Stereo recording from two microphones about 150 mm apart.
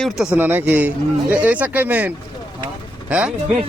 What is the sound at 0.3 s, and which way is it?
A man's voice, 15° right (ahead or behind).